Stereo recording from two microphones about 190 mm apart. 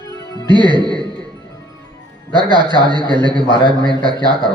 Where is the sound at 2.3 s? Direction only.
25° right (ahead or behind).